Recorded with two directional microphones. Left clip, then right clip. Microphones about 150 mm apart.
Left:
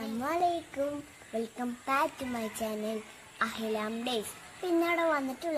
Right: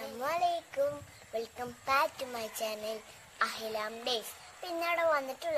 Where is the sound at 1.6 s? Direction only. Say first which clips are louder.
Even; 15° right (ahead or behind).